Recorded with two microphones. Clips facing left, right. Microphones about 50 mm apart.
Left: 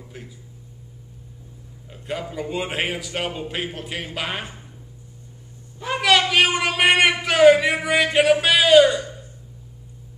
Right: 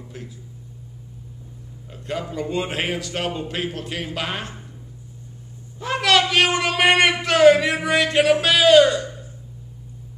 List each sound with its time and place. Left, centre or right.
0.0 s speech: centre
1.9 s a man's voice: centre
5.8 s a man's voice: centre